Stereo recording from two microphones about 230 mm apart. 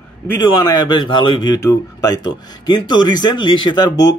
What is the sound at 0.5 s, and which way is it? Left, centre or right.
Speech, centre.